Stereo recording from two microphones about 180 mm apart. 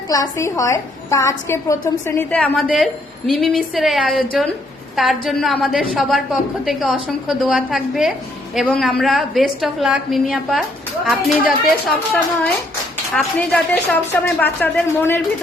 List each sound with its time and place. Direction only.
0.1 s a woman's voice: 20° left (ahead or behind)